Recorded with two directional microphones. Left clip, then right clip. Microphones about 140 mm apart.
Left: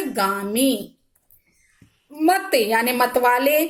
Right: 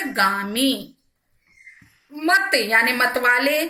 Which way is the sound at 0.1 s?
25° left (ahead or behind).